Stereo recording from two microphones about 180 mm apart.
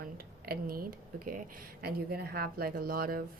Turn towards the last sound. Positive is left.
turn(degrees=-55)  # may be behind; listen again after turning